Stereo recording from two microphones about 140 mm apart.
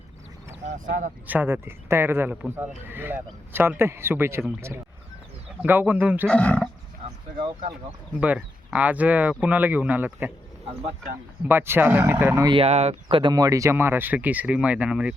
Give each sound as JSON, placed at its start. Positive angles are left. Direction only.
{"t": 0.7, "sound": "speech", "side_deg": -70}
{"t": 1.3, "sound": "a man's voice", "side_deg": -15}
{"t": 6.2, "sound": "roaring cats", "side_deg": 10}
{"t": 7.3, "sound": "speech", "side_deg": -30}
{"t": 8.1, "sound": "a man's voice", "side_deg": -10}
{"t": 11.4, "sound": "a man's voice", "side_deg": -15}
{"t": 12.5, "sound": "speech", "side_deg": -50}
{"t": 13.3, "sound": "a man's voice", "side_deg": -25}